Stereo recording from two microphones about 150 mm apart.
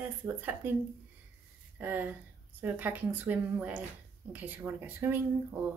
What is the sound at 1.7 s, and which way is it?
A woman's voice, 15° right (ahead or behind).